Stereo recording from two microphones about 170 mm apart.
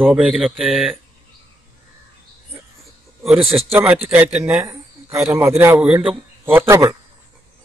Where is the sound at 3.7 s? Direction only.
10° right (ahead or behind).